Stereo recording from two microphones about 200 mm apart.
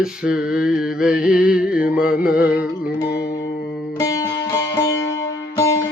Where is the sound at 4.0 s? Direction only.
15° left (ahead or behind).